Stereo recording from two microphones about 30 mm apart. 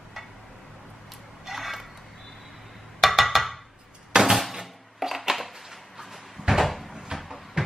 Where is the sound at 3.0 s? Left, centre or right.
Centre.